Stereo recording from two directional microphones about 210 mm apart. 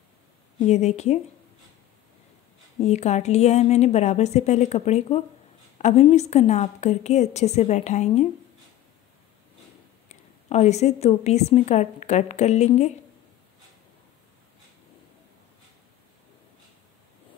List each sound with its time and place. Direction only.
0.7 s a woman's voice: 30° left (ahead or behind)
2.8 s a woman's voice: 30° left (ahead or behind)
10.0 s a woman's voice: 30° left (ahead or behind)